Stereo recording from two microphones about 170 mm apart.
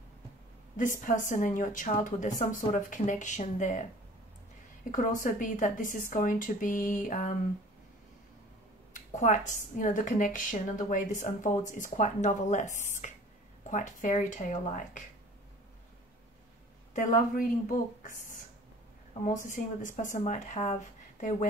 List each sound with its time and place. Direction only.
0.7 s a woman's voice: 50° left (ahead or behind)
4.9 s a woman's voice: 50° left (ahead or behind)
8.9 s a woman's voice: 45° left (ahead or behind)
16.9 s a woman's voice: 50° left (ahead or behind)